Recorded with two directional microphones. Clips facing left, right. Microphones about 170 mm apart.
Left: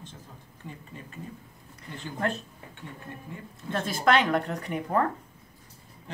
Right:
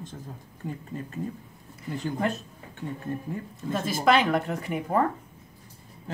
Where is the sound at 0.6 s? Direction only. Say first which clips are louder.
Right 8 dB; 40° right (ahead or behind).